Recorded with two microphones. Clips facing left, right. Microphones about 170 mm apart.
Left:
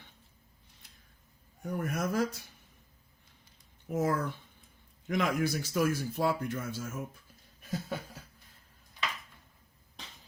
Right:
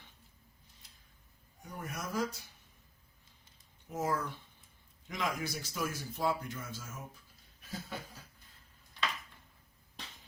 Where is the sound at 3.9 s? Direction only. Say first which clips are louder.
Left 5 dB; 60° left (ahead or behind).